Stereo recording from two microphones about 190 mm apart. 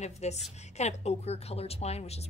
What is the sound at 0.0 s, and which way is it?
A woman's voice, 35° left (ahead or behind).